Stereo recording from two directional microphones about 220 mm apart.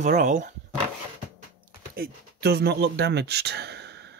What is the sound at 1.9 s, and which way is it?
Speech, 45° right (ahead or behind).